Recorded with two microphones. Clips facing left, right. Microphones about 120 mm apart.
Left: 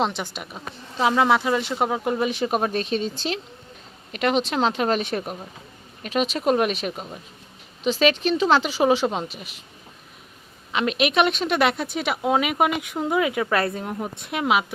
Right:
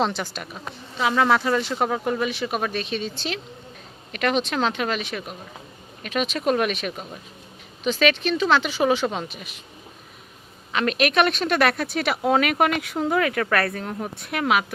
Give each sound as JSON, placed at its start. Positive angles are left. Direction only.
{"t": 0.1, "sound": "speech", "side_deg": 20}
{"t": 2.1, "sound": "speech", "side_deg": 30}
{"t": 6.0, "sound": "speech", "side_deg": 30}
{"t": 10.7, "sound": "speech", "side_deg": 15}